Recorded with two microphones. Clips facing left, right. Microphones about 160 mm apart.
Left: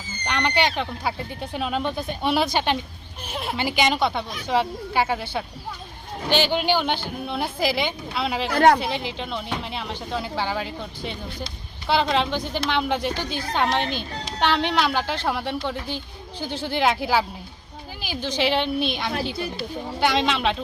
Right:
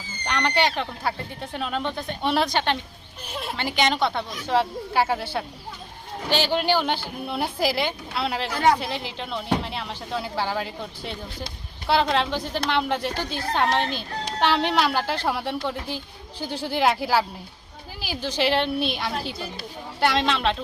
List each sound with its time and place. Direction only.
0.3 s speech: centre (ahead or behind)
8.5 s speech: 65° left (ahead or behind)
8.8 s speech: centre (ahead or behind)